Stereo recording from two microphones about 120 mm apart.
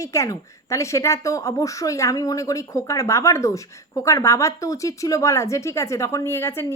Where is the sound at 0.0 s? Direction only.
25° left (ahead or behind).